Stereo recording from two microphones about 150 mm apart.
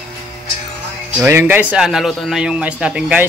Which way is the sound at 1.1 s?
15° right (ahead or behind).